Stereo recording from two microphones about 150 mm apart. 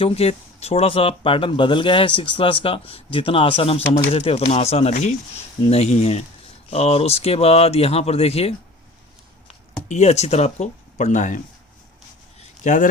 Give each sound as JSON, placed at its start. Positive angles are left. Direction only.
{"t": 0.0, "sound": "speech", "side_deg": 40}
{"t": 12.6, "sound": "speech", "side_deg": 60}